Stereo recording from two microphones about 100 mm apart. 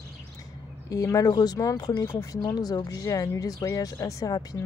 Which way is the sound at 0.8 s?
35° left (ahead or behind).